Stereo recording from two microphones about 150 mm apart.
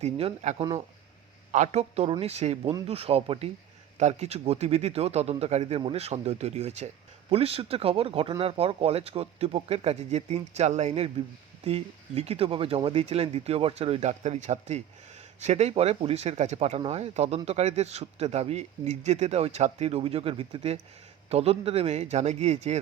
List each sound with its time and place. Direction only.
0.0 s speech: 45° right (ahead or behind)
1.5 s speech: 50° right (ahead or behind)